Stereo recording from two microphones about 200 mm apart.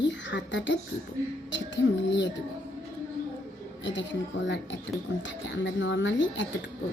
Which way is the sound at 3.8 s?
65° left (ahead or behind).